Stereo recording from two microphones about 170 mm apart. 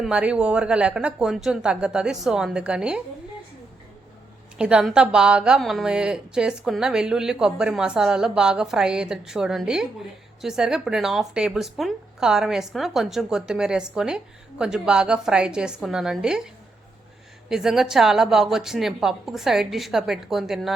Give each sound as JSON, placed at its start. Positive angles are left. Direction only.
{"t": 0.0, "sound": "a woman's voice", "side_deg": -5}
{"t": 4.5, "sound": "a woman's voice", "side_deg": -5}
{"t": 17.5, "sound": "a woman's voice", "side_deg": -5}